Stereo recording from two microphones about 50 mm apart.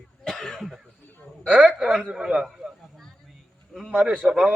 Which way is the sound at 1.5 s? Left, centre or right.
Right.